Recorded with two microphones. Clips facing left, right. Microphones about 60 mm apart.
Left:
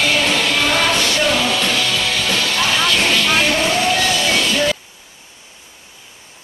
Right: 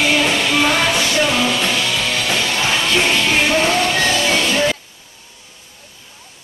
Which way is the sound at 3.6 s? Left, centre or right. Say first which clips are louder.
Right 1 dB; right.